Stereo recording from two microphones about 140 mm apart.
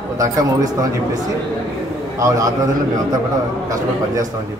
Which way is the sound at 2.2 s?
25° right (ahead or behind).